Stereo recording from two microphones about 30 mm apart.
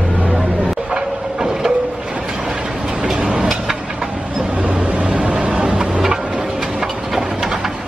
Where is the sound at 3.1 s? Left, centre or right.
Right.